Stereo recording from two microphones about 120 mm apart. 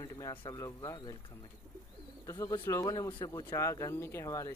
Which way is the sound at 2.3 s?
25° left (ahead or behind).